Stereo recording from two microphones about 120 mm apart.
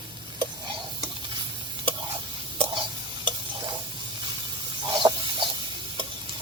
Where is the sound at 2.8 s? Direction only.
40° right (ahead or behind).